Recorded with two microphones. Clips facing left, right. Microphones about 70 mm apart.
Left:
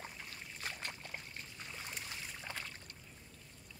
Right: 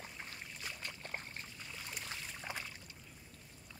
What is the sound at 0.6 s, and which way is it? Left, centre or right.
Boat, left.